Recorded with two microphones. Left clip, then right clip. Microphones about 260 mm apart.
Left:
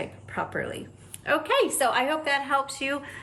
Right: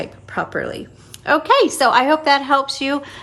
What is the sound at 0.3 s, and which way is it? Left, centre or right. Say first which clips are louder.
A woman's voice: right 8 dB; centre.